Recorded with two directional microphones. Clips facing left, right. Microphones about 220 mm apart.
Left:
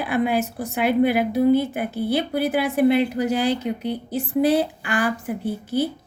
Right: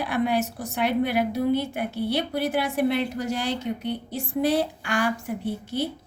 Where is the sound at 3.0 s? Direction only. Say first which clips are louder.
Left 6 dB; 65° left (ahead or behind).